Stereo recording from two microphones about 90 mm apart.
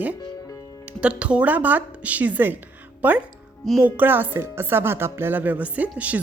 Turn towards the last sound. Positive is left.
turn(degrees=-15)  # may be behind; listen again after turning